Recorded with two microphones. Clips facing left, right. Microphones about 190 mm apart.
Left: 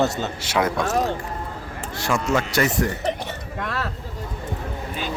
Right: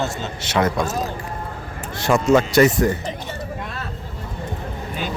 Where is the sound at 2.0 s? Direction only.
20° right (ahead or behind).